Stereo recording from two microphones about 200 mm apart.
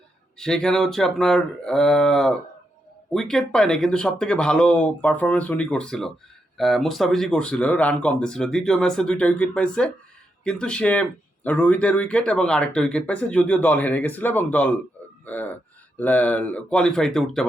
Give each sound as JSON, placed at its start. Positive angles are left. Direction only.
{"t": 0.3, "sound": "speech", "side_deg": 5}